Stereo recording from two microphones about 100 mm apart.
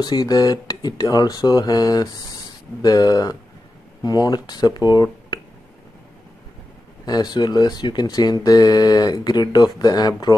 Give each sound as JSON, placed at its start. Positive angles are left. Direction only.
{"t": 0.0, "sound": "speech", "side_deg": 40}
{"t": 4.9, "sound": "a sound", "side_deg": 45}
{"t": 7.1, "sound": "speech", "side_deg": 40}